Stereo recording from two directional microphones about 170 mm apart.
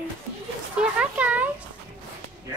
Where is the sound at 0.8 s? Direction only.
10° right (ahead or behind).